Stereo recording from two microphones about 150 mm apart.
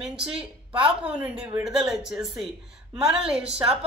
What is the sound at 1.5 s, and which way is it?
A woman's voice, 5° right (ahead or behind).